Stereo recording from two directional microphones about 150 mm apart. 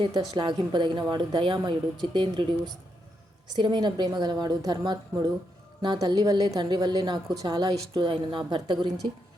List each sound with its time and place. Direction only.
0.0 s a woman's voice: 30° right (ahead or behind)